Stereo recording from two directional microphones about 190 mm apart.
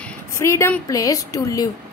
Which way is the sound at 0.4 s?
15° left (ahead or behind).